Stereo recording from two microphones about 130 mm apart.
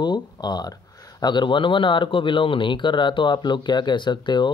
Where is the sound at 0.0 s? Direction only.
35° left (ahead or behind).